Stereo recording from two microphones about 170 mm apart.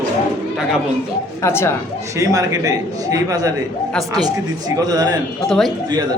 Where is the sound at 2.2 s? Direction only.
20° right (ahead or behind).